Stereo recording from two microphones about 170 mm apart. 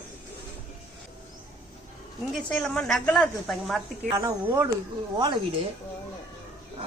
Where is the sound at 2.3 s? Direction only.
5° left (ahead or behind).